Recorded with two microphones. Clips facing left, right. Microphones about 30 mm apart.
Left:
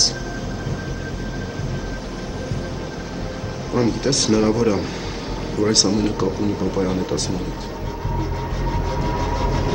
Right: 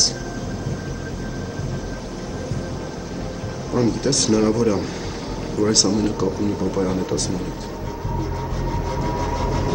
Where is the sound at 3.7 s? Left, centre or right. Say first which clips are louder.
Even; centre.